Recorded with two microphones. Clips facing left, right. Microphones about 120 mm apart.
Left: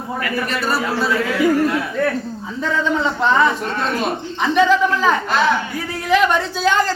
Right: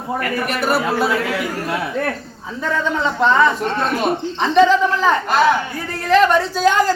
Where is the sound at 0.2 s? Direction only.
55° right (ahead or behind).